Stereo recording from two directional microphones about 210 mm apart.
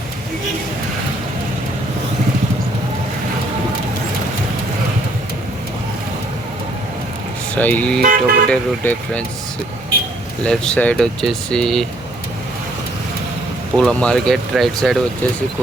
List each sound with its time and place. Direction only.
7.5 s speech: 10° left (ahead or behind)
8.0 s speech: 40° right (ahead or behind)
8.4 s speech: 5° left (ahead or behind)
10.4 s speech: 5° left (ahead or behind)
13.7 s speech: 5° left (ahead or behind)